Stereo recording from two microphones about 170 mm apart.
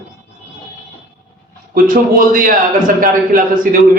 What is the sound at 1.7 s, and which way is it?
A man's voice, 55° right (ahead or behind).